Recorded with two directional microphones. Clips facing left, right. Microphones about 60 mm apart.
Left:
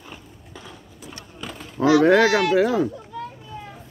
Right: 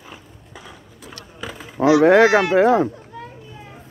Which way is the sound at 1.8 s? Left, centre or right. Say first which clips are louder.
Right 3 dB; right.